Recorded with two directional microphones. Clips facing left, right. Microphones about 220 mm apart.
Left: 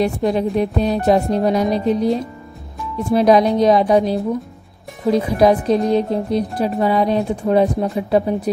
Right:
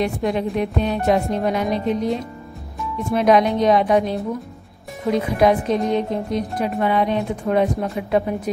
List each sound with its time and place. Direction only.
0.0 s speech: 35° left (ahead or behind)